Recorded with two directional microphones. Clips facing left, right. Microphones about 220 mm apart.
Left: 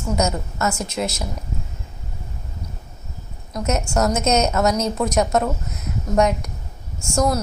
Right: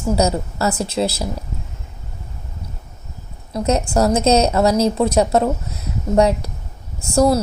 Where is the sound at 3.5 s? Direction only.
30° right (ahead or behind).